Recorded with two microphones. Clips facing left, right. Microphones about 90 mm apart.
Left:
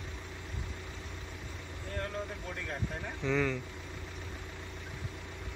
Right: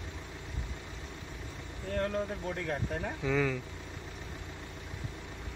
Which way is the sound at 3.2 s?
5° right (ahead or behind).